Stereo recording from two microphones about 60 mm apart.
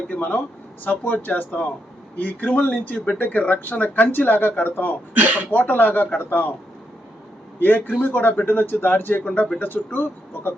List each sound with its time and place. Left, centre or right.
0.1 s speech: left
5.1 s speech: right
5.5 s speech: left
7.9 s speech: left